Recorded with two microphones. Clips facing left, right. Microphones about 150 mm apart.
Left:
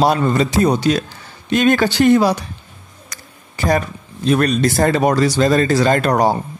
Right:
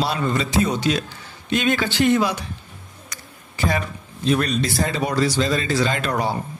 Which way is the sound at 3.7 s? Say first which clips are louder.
Left 7 dB; 45° left (ahead or behind).